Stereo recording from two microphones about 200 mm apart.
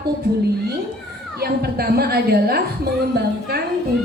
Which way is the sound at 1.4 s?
50° right (ahead or behind).